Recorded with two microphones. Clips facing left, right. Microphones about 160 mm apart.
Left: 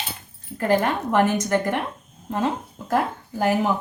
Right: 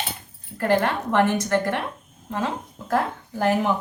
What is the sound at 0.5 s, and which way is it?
A woman's voice, 10° left (ahead or behind).